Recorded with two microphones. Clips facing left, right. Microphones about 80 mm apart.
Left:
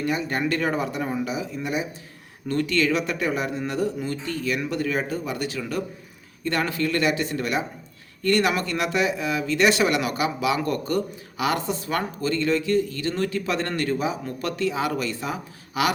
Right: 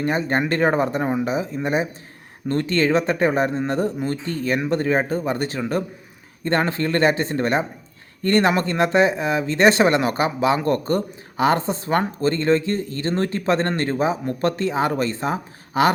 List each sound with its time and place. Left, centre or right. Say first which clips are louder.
0.0 s speech: right 4 dB; right